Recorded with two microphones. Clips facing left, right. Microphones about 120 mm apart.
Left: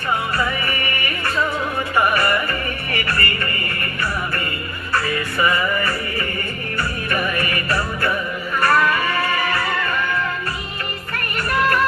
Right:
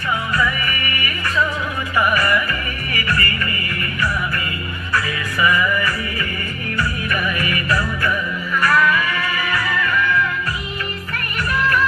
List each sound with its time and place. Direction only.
0.3 s music: 35° left (ahead or behind)
2.0 s music: 35° left (ahead or behind)
4.9 s music: 35° left (ahead or behind)